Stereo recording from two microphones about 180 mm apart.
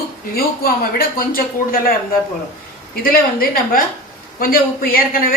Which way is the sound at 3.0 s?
55° left (ahead or behind).